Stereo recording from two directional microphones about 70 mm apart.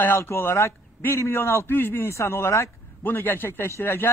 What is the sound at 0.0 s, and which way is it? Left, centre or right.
A man's voice, left.